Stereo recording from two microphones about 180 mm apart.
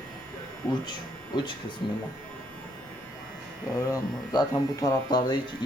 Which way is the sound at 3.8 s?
20° left (ahead or behind).